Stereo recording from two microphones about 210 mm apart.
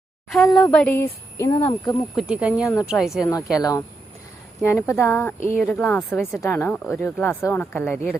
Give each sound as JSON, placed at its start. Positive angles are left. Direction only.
{"t": 0.3, "sound": "speech", "side_deg": 0}
{"t": 2.1, "sound": "speech", "side_deg": -5}
{"t": 3.2, "sound": "speech", "side_deg": 15}
{"t": 4.6, "sound": "speech", "side_deg": 10}